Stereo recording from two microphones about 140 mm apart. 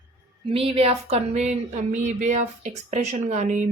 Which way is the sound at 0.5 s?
45° right (ahead or behind).